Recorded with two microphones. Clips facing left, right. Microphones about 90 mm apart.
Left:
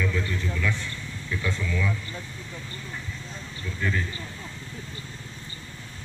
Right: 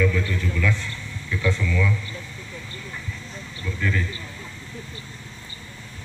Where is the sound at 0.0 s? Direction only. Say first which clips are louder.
Right 5 dB; 15° left (ahead or behind).